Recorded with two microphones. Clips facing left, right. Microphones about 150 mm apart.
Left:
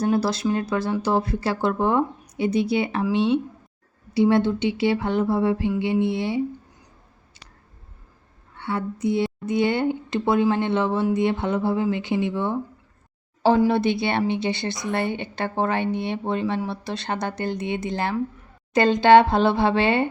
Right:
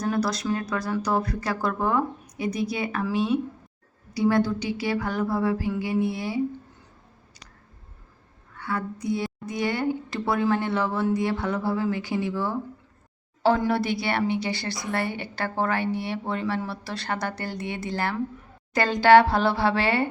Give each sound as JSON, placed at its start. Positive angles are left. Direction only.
{"t": 0.0, "sound": "a woman's voice", "side_deg": 30}
{"t": 8.5, "sound": "a woman's voice", "side_deg": 25}